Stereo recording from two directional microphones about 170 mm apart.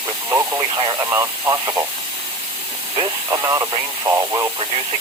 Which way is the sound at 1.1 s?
15° right (ahead or behind).